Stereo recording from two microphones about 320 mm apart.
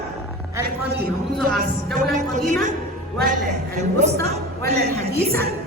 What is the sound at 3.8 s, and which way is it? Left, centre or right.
Speech, right.